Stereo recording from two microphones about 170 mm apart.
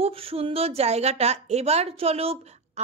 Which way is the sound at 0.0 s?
35° right (ahead or behind).